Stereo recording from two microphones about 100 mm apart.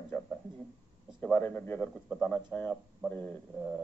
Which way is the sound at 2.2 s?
5° left (ahead or behind).